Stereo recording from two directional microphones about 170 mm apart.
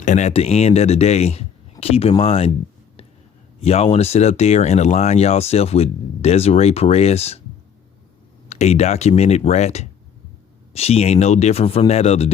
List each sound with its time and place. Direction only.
0.0 s speech: 45° left (ahead or behind)
3.6 s speech: 35° left (ahead or behind)
8.4 s speech: 40° left (ahead or behind)